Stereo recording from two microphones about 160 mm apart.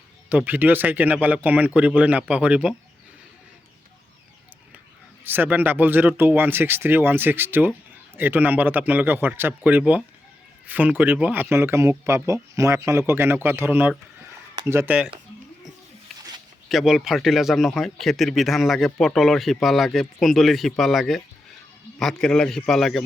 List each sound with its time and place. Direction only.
0.3 s speech: 10° right (ahead or behind)
5.2 s speech: 10° right (ahead or behind)
16.6 s speech: centre (ahead or behind)